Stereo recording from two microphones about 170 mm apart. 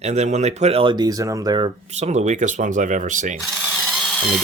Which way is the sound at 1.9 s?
40° right (ahead or behind).